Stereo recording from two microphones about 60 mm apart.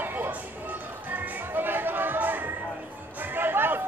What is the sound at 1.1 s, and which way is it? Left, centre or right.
Music, right.